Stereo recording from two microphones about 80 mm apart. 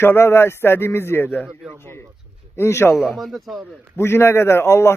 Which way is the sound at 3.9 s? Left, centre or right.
Left.